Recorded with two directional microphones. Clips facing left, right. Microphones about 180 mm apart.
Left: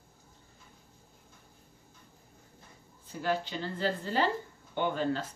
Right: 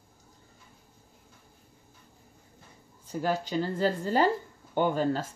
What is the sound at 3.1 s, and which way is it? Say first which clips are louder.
Speech: right 3 dB; 40° right (ahead or behind).